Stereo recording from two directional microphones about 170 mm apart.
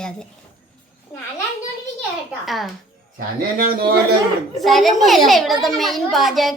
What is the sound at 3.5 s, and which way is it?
Speech, 60° right (ahead or behind).